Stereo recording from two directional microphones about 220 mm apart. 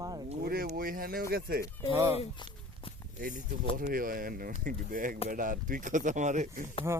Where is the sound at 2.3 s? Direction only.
20° left (ahead or behind).